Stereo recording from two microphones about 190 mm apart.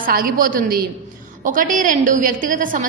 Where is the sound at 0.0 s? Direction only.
50° right (ahead or behind).